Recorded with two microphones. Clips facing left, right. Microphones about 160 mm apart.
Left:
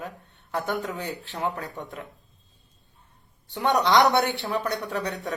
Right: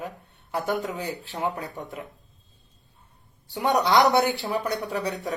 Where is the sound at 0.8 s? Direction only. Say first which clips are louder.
Right 1 dB; 20° right (ahead or behind).